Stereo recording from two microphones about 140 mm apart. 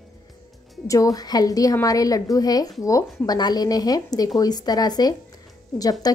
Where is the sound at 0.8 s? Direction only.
25° left (ahead or behind).